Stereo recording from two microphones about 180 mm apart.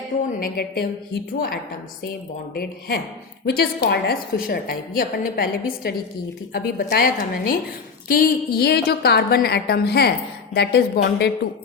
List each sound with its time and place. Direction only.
0.3 s a woman's voice: 55° left (ahead or behind)
3.4 s a woman's voice: 60° left (ahead or behind)